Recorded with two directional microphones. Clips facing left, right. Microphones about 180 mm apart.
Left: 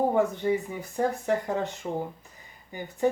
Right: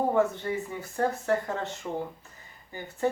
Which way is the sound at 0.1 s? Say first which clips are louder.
Left 2 dB; 15° left (ahead or behind).